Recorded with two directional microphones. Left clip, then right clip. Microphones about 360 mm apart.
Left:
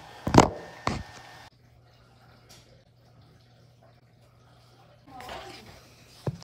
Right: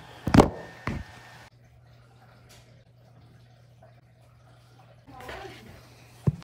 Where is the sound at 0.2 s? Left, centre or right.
Centre.